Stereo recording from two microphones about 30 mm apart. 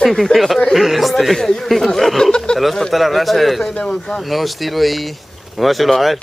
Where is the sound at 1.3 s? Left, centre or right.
Centre.